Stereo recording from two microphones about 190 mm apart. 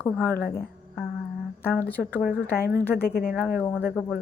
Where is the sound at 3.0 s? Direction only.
55° left (ahead or behind).